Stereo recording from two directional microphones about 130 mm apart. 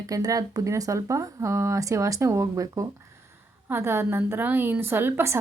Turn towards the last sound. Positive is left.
turn(degrees=-20)  # may be behind; listen again after turning